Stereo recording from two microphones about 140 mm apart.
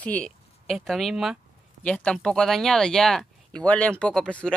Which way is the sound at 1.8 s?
10° left (ahead or behind).